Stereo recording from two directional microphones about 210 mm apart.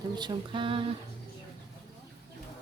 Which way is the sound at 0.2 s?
25° right (ahead or behind).